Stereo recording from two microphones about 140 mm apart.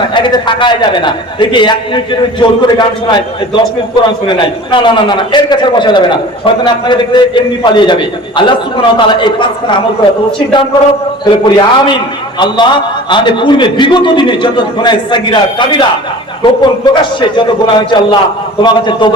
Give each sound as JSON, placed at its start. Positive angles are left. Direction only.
{"t": 0.1, "sound": "a man's voice", "side_deg": 30}
{"t": 11.3, "sound": "a man's voice", "side_deg": 35}